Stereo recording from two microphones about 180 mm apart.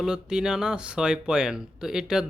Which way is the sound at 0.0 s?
5° right (ahead or behind).